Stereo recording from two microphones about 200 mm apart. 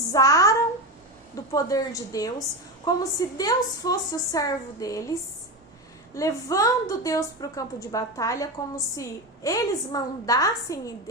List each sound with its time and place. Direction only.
0.1 s a woman's voice: 15° left (ahead or behind)
6.1 s a woman's voice: 15° left (ahead or behind)